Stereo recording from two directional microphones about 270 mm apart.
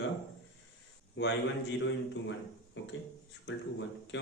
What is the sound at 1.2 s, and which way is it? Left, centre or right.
Speech, left.